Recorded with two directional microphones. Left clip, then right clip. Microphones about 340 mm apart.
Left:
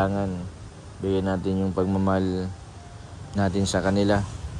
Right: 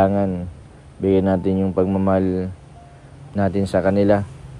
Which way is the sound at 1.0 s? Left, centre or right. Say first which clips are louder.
Right 8 dB; right.